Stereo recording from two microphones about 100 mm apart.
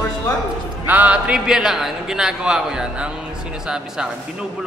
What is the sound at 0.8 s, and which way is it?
A man's voice, 15° right (ahead or behind).